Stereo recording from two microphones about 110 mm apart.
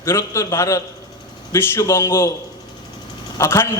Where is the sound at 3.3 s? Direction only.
25° left (ahead or behind).